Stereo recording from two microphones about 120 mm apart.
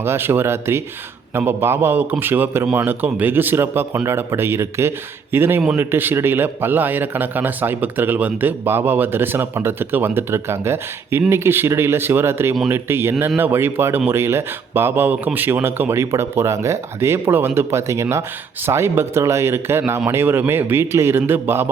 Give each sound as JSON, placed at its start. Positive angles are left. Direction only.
{"t": 0.0, "sound": "a man's voice", "side_deg": -20}